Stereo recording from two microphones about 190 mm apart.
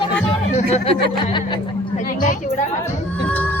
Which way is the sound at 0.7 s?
30° left (ahead or behind).